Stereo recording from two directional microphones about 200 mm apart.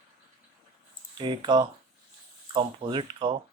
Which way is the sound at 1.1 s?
20° right (ahead or behind).